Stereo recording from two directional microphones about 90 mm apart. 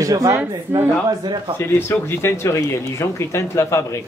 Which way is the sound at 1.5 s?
25° left (ahead or behind).